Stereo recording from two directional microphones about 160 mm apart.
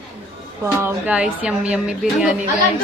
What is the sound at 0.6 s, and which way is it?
Speech, 15° right (ahead or behind).